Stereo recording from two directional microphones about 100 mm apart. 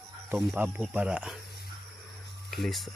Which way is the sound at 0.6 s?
15° right (ahead or behind).